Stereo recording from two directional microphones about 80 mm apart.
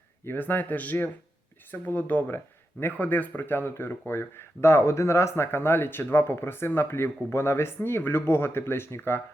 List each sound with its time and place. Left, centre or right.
0.3 s speech: left